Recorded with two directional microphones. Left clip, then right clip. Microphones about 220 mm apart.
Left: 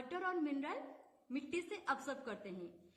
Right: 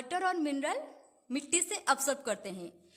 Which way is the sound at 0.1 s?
50° right (ahead or behind).